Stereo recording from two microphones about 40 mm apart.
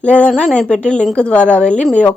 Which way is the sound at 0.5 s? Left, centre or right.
Left.